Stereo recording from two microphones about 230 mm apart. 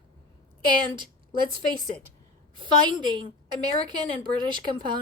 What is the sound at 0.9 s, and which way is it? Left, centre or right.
A woman's voice, centre.